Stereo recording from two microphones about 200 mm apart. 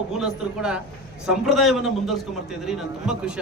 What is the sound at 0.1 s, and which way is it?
A man's voice, 5° right (ahead or behind).